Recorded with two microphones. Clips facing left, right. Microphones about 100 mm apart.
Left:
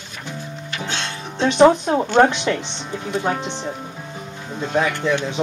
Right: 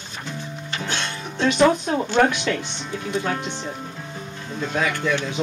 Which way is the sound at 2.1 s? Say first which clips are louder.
Left 4 dB; 25° left (ahead or behind).